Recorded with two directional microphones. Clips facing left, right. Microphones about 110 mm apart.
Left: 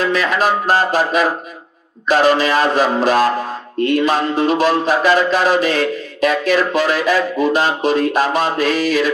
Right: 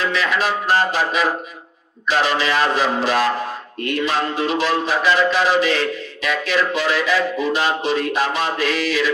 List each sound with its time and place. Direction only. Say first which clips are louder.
0.0 s music: left 4 dB; 45° left (ahead or behind)